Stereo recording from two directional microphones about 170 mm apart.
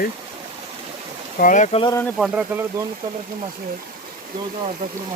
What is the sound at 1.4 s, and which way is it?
Speech, 50° left (ahead or behind).